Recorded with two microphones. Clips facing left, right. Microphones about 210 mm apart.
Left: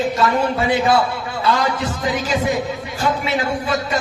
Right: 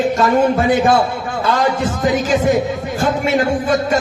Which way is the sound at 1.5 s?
45° right (ahead or behind).